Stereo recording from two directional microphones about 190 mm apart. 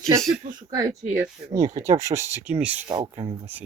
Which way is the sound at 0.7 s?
15° right (ahead or behind).